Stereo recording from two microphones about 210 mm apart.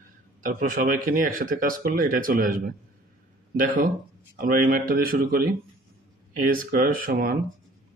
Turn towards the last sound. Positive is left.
turn(degrees=-45)  # may be behind; listen again after turning